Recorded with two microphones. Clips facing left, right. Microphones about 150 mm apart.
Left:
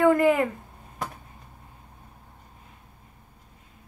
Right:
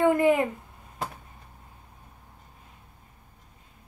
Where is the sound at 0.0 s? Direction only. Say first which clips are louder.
Left 1 dB; 20° right (ahead or behind).